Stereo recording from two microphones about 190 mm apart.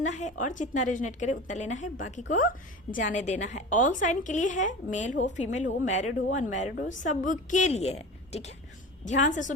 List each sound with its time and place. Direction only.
0.0 s a woman's voice: 40° left (ahead or behind)